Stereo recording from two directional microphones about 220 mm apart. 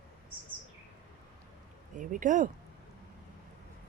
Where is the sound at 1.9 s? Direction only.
35° right (ahead or behind).